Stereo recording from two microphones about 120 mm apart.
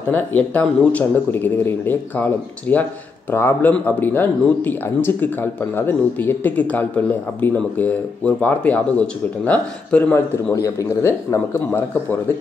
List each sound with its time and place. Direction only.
0.1 s speech: 15° left (ahead or behind)
10.1 s speech: 25° left (ahead or behind)